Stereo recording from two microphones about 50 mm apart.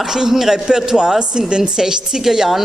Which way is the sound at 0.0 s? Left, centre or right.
Centre.